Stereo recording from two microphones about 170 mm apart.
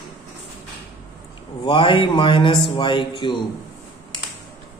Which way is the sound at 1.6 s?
30° left (ahead or behind).